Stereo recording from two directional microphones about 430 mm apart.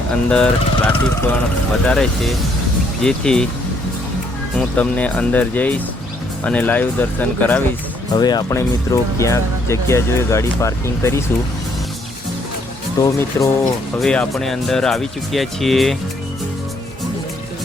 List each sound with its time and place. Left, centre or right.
0.1 s speech: centre
4.5 s speech: centre
13.0 s speech: centre